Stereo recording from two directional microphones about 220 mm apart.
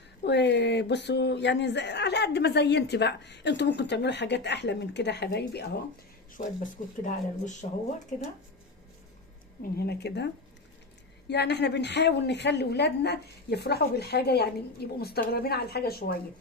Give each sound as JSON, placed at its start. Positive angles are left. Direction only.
{"t": 0.3, "sound": "speech", "side_deg": 50}
{"t": 6.4, "sound": "speech", "side_deg": 40}
{"t": 9.7, "sound": "speech", "side_deg": 45}